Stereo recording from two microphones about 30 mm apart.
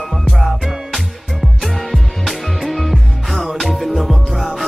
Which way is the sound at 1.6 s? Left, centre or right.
Centre.